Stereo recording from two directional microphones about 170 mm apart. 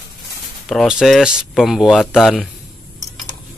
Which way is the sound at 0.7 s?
Centre (ahead or behind).